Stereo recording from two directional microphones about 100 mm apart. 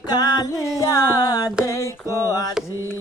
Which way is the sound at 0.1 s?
40° left (ahead or behind).